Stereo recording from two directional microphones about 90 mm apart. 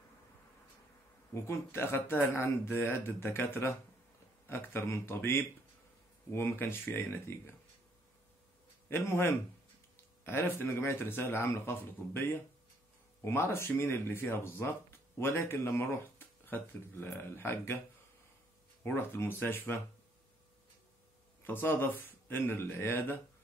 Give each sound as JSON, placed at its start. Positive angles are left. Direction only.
{"t": 1.3, "sound": "speech", "side_deg": 30}
{"t": 6.6, "sound": "speech", "side_deg": 20}
{"t": 8.8, "sound": "speech", "side_deg": 25}
{"t": 18.9, "sound": "speech", "side_deg": 25}
{"t": 21.5, "sound": "speech", "side_deg": 20}